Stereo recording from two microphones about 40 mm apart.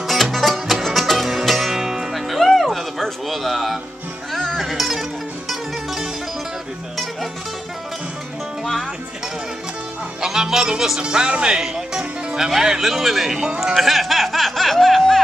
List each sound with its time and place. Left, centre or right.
0.0 s music: centre
4.3 s music: centre
4.6 s music: centre
10.2 s music: centre
11.0 s speech: right
11.6 s music: centre
12.4 s speech: centre
13.8 s music: centre